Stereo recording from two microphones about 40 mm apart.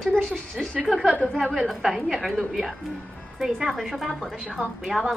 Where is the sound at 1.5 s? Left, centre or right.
Centre.